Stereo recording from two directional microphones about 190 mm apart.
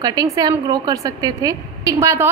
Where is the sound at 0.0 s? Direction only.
20° right (ahead or behind).